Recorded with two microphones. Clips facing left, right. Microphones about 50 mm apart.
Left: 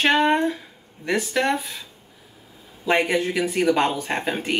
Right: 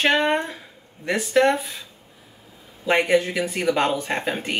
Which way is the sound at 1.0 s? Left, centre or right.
Centre.